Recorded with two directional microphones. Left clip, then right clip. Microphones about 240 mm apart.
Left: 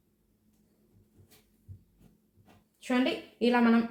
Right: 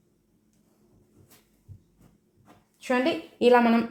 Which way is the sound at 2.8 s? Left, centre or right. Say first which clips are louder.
Right 5 dB; right.